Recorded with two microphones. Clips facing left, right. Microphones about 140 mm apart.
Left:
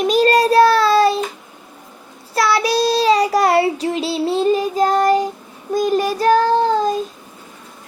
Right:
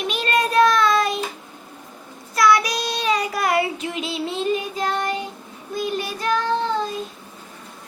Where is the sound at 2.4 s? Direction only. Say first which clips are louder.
Left 2 dB; 30° left (ahead or behind).